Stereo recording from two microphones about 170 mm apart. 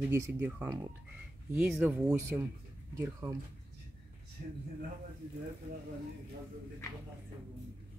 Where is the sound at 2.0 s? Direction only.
15° right (ahead or behind).